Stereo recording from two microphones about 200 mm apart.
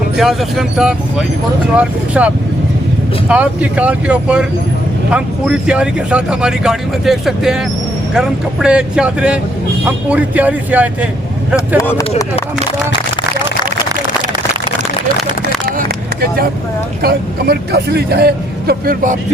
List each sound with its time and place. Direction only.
0.2 s speech: centre (ahead or behind)
11.8 s speech: 15° left (ahead or behind)
17.0 s speech: 50° right (ahead or behind)